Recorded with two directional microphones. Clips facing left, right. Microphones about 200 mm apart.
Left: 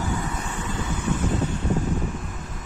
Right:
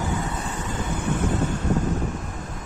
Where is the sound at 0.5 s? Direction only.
40° right (ahead or behind).